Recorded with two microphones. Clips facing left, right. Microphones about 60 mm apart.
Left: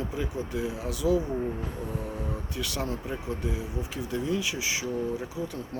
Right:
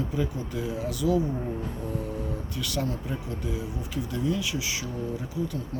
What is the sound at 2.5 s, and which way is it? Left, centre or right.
Speech, left.